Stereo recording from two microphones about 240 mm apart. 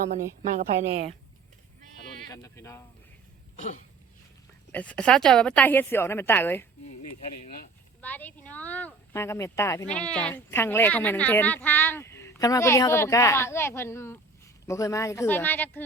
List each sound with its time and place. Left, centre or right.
0.4 s a woman's voice: right
2.3 s speech: centre
3.5 s throat clearing: left
4.7 s speech: centre
8.0 s speech: centre